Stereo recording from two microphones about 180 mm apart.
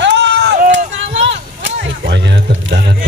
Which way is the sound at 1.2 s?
90° right.